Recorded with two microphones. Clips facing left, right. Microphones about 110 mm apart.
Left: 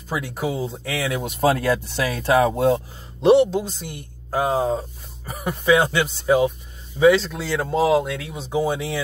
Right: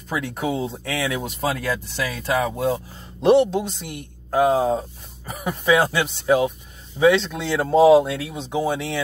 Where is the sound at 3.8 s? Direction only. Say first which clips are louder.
Right 1 dB; 30° left (ahead or behind).